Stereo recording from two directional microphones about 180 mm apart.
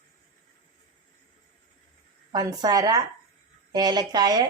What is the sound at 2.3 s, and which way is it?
A woman's voice, 20° right (ahead or behind).